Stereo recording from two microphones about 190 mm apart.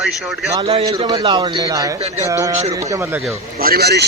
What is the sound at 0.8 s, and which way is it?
A man's voice, 20° right (ahead or behind).